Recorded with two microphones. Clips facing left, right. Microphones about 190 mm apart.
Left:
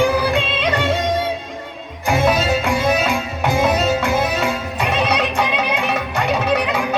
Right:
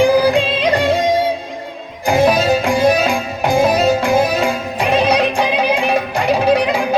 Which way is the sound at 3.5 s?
15° right (ahead or behind).